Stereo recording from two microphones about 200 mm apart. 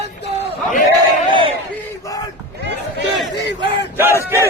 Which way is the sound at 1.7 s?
15° left (ahead or behind).